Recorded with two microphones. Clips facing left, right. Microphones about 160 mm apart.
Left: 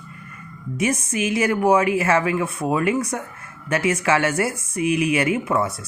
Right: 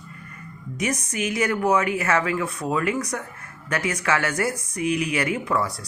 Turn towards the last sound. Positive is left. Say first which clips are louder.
# left 3 dB
turn(degrees=25)  # may be behind; listen again after turning